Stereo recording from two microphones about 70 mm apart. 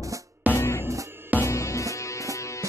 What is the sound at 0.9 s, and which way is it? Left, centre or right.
Music, right.